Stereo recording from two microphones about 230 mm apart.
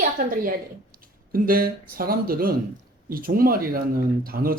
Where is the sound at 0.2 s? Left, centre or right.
Right.